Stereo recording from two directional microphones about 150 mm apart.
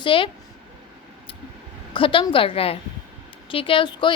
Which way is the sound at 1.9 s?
35° left (ahead or behind).